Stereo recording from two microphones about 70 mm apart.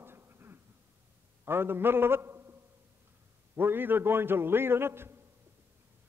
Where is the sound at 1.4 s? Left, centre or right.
Right.